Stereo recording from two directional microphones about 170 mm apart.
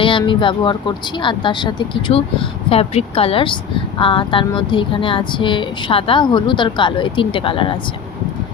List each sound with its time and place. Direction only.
0.0 s speech: 30° left (ahead or behind)